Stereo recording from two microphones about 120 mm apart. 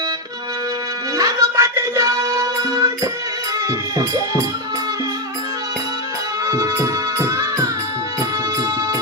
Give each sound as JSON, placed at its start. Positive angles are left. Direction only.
{"t": 1.1, "sound": "music", "side_deg": -30}
{"t": 6.4, "sound": "music", "side_deg": -25}